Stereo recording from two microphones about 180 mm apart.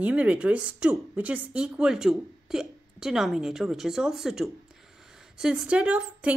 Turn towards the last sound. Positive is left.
turn(degrees=-5)  # may be behind; listen again after turning